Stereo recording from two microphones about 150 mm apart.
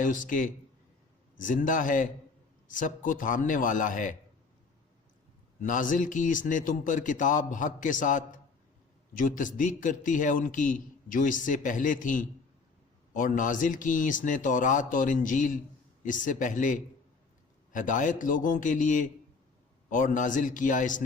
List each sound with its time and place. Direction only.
0.0 s a man's voice: 60° left (ahead or behind)
5.5 s a man's voice: 60° left (ahead or behind)